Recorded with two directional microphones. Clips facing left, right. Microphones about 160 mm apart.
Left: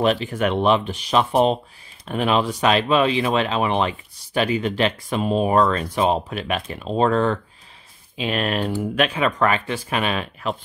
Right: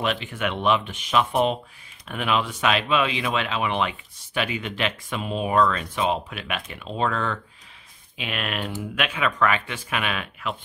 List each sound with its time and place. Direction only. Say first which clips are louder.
0.0 s speech: left 7 dB; 40° left (ahead or behind)